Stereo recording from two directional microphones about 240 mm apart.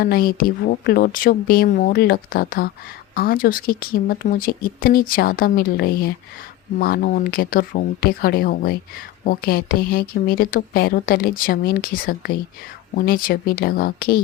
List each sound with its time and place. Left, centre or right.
0.0 s speech: left